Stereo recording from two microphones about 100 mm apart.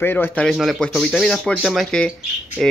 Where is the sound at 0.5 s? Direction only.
Centre (ahead or behind).